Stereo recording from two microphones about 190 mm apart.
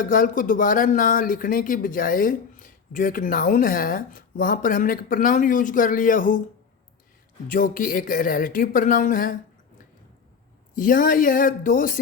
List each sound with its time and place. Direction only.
0.0 s speech: 45° left (ahead or behind)
7.4 s speech: 45° left (ahead or behind)
10.8 s speech: 45° left (ahead or behind)